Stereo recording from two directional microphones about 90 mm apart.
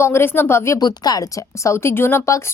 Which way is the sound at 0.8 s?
50° left (ahead or behind).